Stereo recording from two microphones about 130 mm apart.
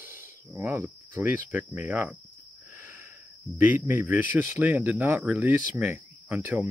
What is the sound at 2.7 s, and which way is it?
Wheeze, 15° right (ahead or behind).